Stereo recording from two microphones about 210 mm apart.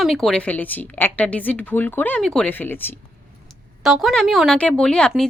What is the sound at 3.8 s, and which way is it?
Speech, centre (ahead or behind).